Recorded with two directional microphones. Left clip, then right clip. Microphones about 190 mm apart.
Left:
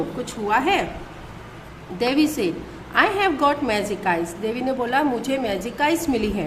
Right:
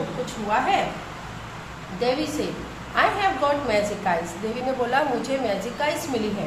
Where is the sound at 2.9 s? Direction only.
40° left (ahead or behind).